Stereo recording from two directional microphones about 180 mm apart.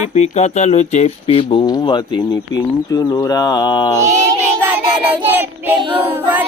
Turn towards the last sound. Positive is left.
turn(degrees=-10)  # may be behind; listen again after turning